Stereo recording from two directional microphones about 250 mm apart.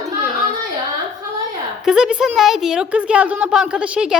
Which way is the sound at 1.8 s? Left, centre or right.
Centre.